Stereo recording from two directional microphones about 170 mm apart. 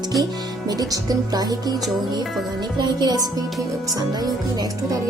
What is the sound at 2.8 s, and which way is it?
Music, 25° right (ahead or behind).